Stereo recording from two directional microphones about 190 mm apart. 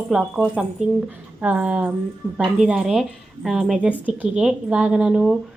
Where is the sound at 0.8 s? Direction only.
35° right (ahead or behind).